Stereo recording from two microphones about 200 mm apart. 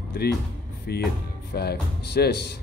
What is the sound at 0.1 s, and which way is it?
Speech, 50° left (ahead or behind).